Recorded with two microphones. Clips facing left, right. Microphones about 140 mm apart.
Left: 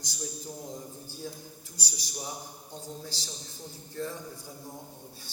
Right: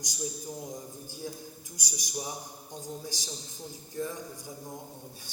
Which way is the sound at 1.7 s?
15° right (ahead or behind).